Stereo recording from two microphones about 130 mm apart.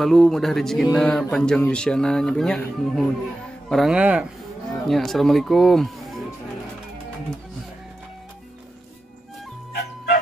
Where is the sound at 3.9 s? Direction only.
10° right (ahead or behind).